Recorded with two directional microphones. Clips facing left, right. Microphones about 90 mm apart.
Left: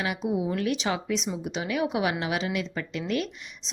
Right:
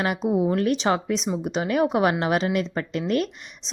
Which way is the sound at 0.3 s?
45° right (ahead or behind).